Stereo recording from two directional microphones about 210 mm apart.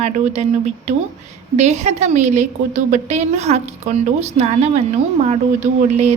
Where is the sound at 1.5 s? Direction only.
30° right (ahead or behind).